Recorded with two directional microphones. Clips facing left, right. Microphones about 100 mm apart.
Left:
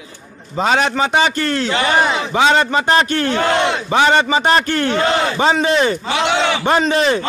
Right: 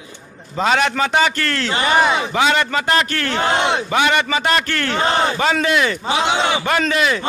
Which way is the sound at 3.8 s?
30° left (ahead or behind).